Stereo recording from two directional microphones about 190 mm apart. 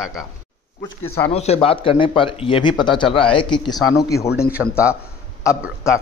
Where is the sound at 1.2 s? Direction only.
30° left (ahead or behind); by 4.3 s 15° left (ahead or behind).